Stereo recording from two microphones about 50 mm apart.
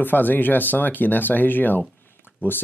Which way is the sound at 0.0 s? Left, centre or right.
Left.